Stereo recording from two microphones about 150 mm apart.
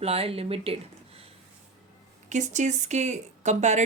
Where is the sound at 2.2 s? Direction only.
50° right (ahead or behind).